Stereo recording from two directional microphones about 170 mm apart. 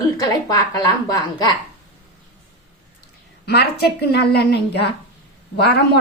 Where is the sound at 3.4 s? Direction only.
70° left (ahead or behind).